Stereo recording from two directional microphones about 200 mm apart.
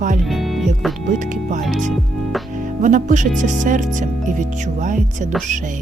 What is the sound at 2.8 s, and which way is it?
Speech, 40° right (ahead or behind).